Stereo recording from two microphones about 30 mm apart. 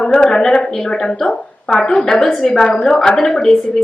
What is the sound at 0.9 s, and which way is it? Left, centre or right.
A woman's voice, left.